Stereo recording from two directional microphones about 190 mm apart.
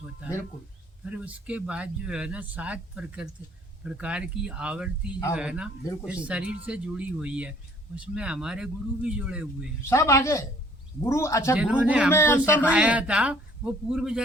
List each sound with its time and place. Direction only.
1.0 s speech: 10° right (ahead or behind)
9.8 s a man's voice: 15° left (ahead or behind)
11.5 s speech: 5° right (ahead or behind)
12.1 s a man's voice: 15° left (ahead or behind)
12.6 s speech: 5° right (ahead or behind)